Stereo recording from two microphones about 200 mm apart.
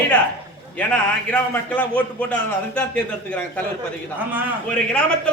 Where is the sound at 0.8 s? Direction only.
5° left (ahead or behind).